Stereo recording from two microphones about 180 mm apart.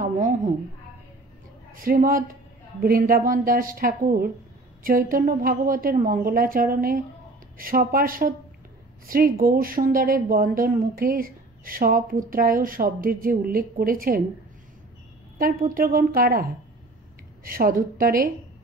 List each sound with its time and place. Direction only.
0.0 s a sound: 45° right (ahead or behind)
1.7 s a woman's voice: 55° right (ahead or behind)
15.3 s a woman's voice: 50° right (ahead or behind)